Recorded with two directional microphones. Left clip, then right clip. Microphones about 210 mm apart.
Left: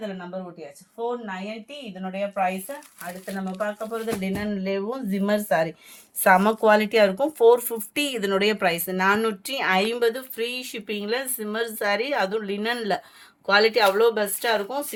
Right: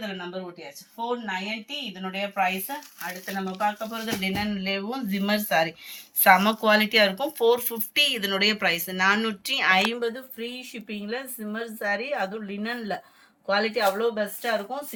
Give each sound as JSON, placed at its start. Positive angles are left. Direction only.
{"t": 2.0, "sound": "a woman's voice", "side_deg": 45}